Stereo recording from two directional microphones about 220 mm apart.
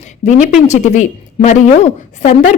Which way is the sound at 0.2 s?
30° left (ahead or behind).